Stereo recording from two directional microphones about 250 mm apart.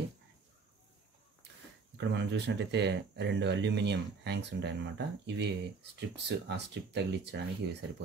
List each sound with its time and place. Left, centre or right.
2.0 s speech: right